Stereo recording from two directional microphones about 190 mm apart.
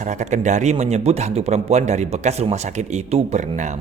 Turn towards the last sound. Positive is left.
turn(degrees=-40)  # may be behind; listen again after turning